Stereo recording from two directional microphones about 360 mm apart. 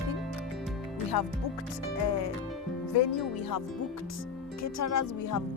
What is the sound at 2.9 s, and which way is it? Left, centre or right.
Speech, left.